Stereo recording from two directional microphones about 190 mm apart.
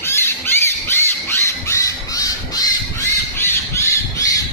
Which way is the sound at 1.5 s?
15° left (ahead or behind).